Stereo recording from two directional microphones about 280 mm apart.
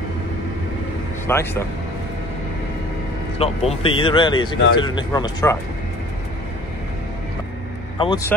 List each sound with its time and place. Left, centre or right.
1.2 s speech: centre
3.3 s speech: left
8.0 s speech: centre